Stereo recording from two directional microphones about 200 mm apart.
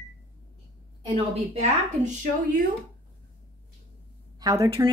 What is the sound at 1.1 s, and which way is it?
A woman's voice, 30° right (ahead or behind).